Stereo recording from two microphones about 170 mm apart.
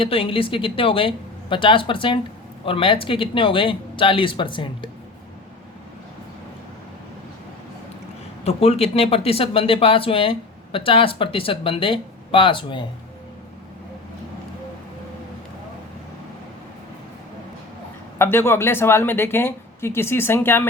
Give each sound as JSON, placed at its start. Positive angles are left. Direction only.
{"t": 0.0, "sound": "speech", "side_deg": 30}
{"t": 8.4, "sound": "speech", "side_deg": 35}
{"t": 18.2, "sound": "speech", "side_deg": 15}